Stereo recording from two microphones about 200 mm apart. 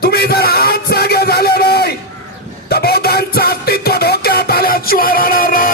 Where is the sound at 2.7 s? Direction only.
50° left (ahead or behind).